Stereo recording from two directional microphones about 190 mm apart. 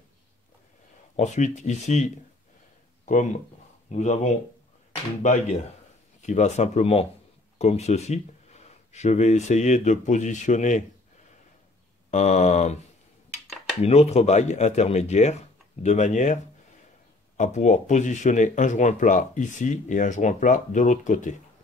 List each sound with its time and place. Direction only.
1.1 s speech: 35° left (ahead or behind)
12.1 s speech: 40° left (ahead or behind)
13.8 s speech: 35° left (ahead or behind)
17.4 s speech: 40° left (ahead or behind)